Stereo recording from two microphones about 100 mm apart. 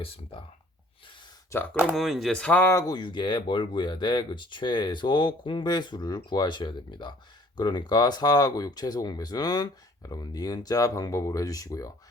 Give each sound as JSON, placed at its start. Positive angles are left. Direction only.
{"t": 0.0, "sound": "speech", "side_deg": 70}
{"t": 1.5, "sound": "speech", "side_deg": 20}
{"t": 1.9, "sound": "speech", "side_deg": 0}
{"t": 2.6, "sound": "speech", "side_deg": 25}
{"t": 2.8, "sound": "speech", "side_deg": 45}